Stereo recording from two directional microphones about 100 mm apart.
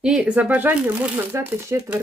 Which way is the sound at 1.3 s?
25° right (ahead or behind).